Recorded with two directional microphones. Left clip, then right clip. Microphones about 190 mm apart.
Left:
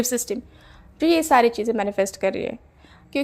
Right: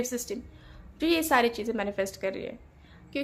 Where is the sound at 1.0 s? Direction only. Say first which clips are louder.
Left 7 dB; 30° left (ahead or behind).